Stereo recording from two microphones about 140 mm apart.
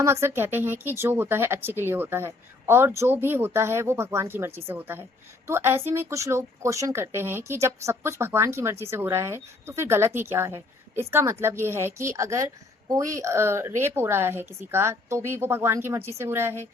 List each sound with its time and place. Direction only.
0.0 s speech: 20° right (ahead or behind)